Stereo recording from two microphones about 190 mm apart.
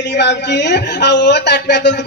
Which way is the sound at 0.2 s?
65° left (ahead or behind).